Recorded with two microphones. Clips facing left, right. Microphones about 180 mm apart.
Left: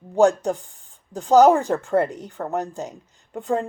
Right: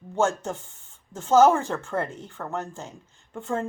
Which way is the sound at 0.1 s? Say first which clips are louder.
Left 7 dB; 15° left (ahead or behind).